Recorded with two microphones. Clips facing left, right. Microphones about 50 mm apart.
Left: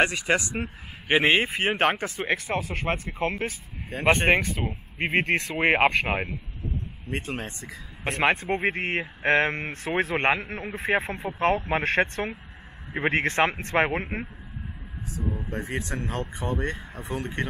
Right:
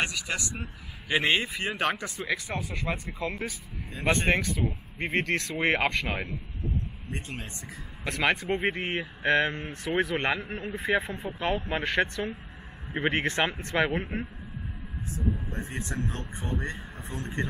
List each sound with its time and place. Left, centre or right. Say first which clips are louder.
0.0 s a man's voice: left 8 dB; left
0.6 s a man's voice: left 7 dB; left
16.0 s speech: left 3 dB; left
16.6 s a man's voice: left 4 dB; left